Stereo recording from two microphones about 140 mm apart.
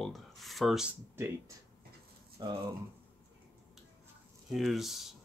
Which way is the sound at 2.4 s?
30° right (ahead or behind).